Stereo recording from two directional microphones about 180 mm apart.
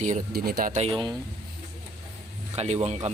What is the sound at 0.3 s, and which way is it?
Speech, 60° right (ahead or behind).